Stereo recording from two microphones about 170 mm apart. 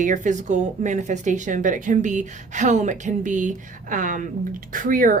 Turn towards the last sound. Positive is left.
turn(degrees=-55)  # may be behind; listen again after turning